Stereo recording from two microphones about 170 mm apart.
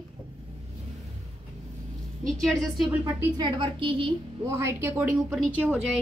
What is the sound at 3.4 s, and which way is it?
Speech, 30° right (ahead or behind).